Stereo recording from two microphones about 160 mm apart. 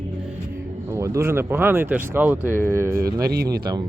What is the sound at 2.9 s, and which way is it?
Speech, 70° right (ahead or behind).